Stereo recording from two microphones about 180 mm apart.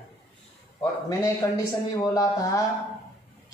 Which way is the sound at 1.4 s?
20° left (ahead or behind).